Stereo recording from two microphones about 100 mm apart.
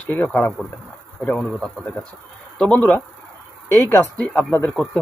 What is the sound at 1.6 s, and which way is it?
Speech, 15° left (ahead or behind).